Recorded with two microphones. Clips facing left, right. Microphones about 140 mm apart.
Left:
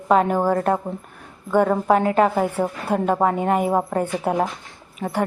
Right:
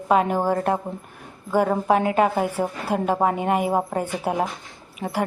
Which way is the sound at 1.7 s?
15° right (ahead or behind).